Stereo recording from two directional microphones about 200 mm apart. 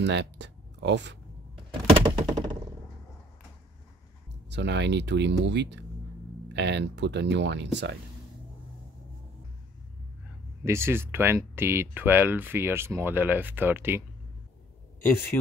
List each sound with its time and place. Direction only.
0.0 s speech: 60° right (ahead or behind)
1.7 s thunk: 25° right (ahead or behind)
4.5 s speech: 60° right (ahead or behind)
10.6 s speech: 15° right (ahead or behind)